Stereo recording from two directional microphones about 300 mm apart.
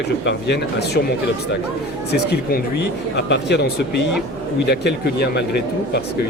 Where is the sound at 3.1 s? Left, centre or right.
Left.